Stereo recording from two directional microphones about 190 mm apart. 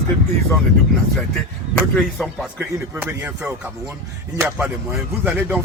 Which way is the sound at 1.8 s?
5° right (ahead or behind).